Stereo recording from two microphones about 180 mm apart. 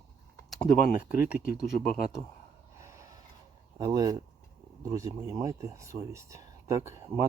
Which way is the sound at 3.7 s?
25° right (ahead or behind).